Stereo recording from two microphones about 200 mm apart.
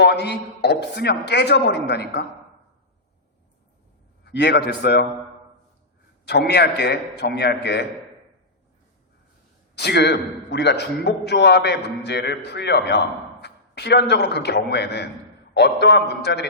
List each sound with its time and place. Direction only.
0.0 s a man's voice: 55° left (ahead or behind)
4.2 s a man's voice: 55° left (ahead or behind)
6.2 s a man's voice: 55° left (ahead or behind)
9.7 s a man's voice: 55° left (ahead or behind)
13.4 s a sound: 55° left (ahead or behind)
14.1 s a man's voice: 55° left (ahead or behind)